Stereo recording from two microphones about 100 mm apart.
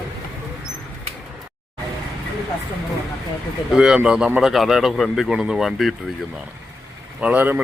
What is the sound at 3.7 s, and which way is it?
A man's voice, 5° right (ahead or behind).